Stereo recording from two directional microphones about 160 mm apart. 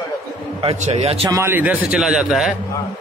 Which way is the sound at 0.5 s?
40° right (ahead or behind).